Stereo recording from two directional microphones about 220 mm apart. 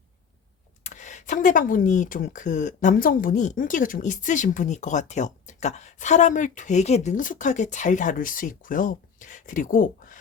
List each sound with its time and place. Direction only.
0.9 s speech: 35° left (ahead or behind)